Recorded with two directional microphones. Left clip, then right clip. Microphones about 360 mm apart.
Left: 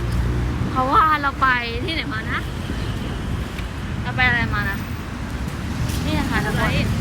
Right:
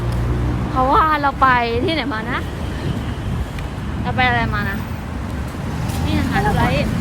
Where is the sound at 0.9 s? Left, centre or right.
Centre.